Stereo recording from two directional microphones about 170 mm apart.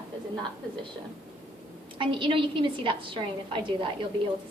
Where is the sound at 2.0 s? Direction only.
30° right (ahead or behind).